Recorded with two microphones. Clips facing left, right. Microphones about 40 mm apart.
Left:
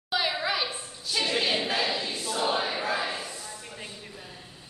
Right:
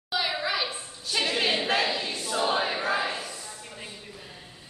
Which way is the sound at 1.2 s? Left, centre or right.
Right.